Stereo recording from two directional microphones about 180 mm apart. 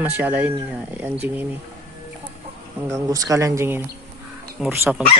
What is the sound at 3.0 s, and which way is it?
Cutlery, 20° right (ahead or behind).